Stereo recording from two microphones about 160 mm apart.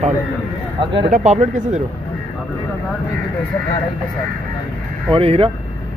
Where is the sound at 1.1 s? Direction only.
50° right (ahead or behind).